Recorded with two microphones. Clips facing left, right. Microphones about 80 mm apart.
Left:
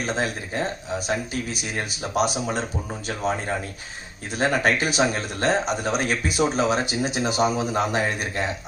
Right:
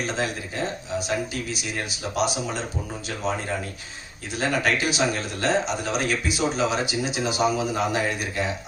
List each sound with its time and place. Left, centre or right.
0.9 s speech: left
4.4 s speech: left